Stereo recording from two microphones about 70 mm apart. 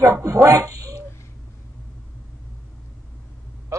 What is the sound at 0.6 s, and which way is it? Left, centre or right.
Cat, right.